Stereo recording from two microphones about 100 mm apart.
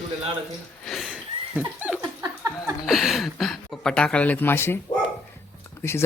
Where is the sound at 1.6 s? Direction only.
15° right (ahead or behind).